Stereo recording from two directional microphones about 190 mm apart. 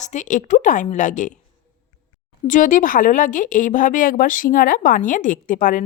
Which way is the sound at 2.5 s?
45° left (ahead or behind).